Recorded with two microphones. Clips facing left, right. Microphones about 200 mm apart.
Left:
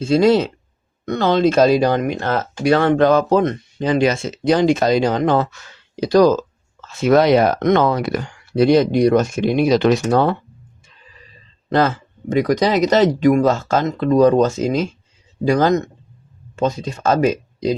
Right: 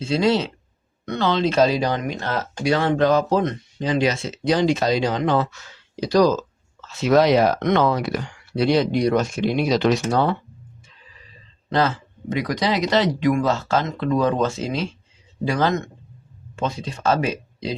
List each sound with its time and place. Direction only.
0.0 s speech: 45° left (ahead or behind)
11.7 s speech: 50° left (ahead or behind)